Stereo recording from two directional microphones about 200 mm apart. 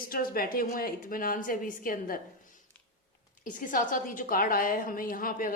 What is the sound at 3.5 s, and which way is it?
Speech, 40° left (ahead or behind).